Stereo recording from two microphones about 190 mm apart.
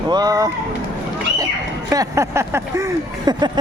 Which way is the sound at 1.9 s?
15° right (ahead or behind).